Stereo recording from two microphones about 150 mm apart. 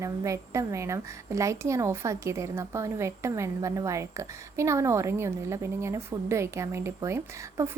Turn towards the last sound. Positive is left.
turn(degrees=-20)  # may be behind; listen again after turning